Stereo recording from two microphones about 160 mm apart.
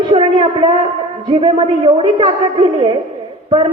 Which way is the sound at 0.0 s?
35° right (ahead or behind).